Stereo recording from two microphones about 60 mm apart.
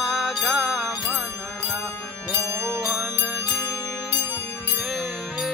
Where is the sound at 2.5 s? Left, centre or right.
Right.